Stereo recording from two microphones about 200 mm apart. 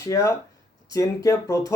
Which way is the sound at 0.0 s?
15° left (ahead or behind).